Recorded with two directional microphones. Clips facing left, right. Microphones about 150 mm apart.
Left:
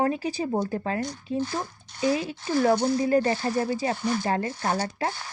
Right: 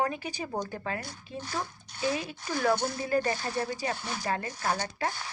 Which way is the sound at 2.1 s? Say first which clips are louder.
Left 8 dB; 25° left (ahead or behind).